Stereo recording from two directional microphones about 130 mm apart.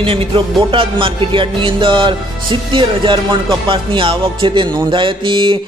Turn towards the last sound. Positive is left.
turn(degrees=-40)  # may be behind; listen again after turning